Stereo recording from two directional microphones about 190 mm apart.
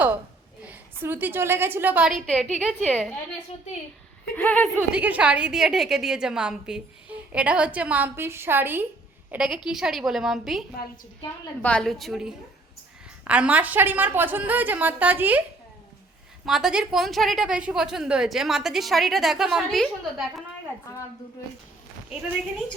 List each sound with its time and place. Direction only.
0.6 s a woman's voice: 10° right (ahead or behind)
4.4 s a woman's voice: 5° left (ahead or behind)
4.9 s a woman's voice: 5° right (ahead or behind)
16.5 s a woman's voice: 5° right (ahead or behind)
20.9 s a woman's voice: 15° left (ahead or behind)